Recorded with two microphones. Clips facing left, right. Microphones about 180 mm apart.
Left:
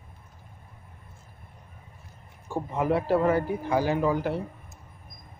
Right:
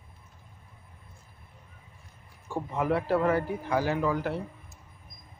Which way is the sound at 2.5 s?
20° left (ahead or behind).